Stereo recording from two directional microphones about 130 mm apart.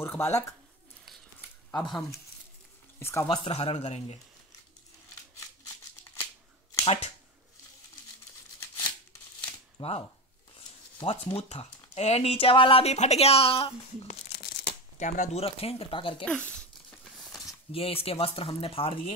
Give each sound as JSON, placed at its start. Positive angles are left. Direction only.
{"t": 0.0, "sound": "speech", "side_deg": 15}
{"t": 3.0, "sound": "speech", "side_deg": 20}
{"t": 3.3, "sound": "speech", "side_deg": 50}
{"t": 6.8, "sound": "speech", "side_deg": 50}
{"t": 8.5, "sound": "a sound", "side_deg": 20}
{"t": 9.8, "sound": "speech", "side_deg": 50}
{"t": 14.5, "sound": "speech", "side_deg": 65}
{"t": 16.3, "sound": "a sound", "side_deg": 5}
{"t": 17.7, "sound": "speech", "side_deg": 50}